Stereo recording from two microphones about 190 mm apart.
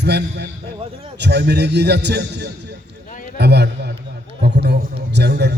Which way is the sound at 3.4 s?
60° right (ahead or behind).